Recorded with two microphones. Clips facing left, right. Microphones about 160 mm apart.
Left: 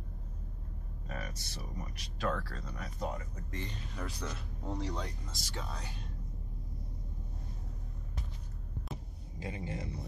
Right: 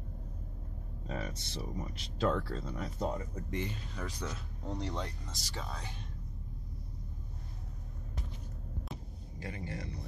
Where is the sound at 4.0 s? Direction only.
5° right (ahead or behind).